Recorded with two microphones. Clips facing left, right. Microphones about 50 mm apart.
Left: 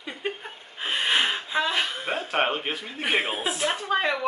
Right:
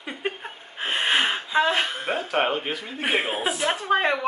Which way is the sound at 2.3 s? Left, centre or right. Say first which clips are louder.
Right 1 dB; centre.